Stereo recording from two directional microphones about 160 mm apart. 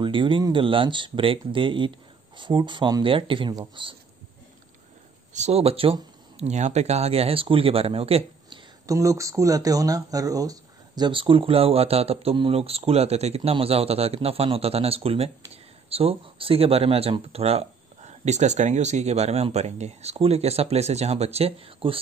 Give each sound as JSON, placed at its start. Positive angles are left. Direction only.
{"t": 0.0, "sound": "speech", "side_deg": -30}
{"t": 5.3, "sound": "speech", "side_deg": -45}
{"t": 8.8, "sound": "speech", "side_deg": -20}